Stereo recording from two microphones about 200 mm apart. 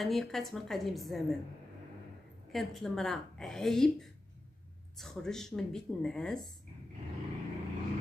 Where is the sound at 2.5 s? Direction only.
Centre (ahead or behind).